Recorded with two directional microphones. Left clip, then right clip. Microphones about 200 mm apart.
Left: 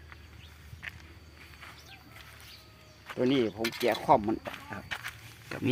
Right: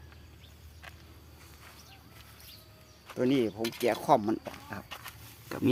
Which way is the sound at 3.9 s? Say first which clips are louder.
Left 1 dB; 20° right (ahead or behind).